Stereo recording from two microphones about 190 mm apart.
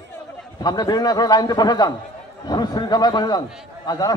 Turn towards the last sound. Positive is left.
turn(degrees=20)  # may be behind; listen again after turning